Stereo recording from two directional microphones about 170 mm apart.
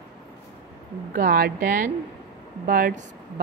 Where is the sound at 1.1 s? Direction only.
65° right (ahead or behind).